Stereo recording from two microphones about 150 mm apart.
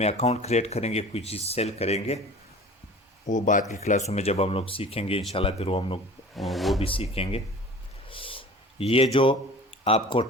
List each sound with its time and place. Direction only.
0.0 s speech: 45° left (ahead or behind)
3.2 s speech: 55° left (ahead or behind); by 6.0 s 40° left (ahead or behind)
6.3 s speech: centre (ahead or behind)
6.8 s speech: 40° left (ahead or behind)
8.1 s a sound: 35° left (ahead or behind)
9.1 s speech: 35° left (ahead or behind)